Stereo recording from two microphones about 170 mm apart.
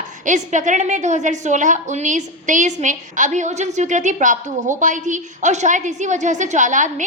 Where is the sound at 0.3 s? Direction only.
45° right (ahead or behind).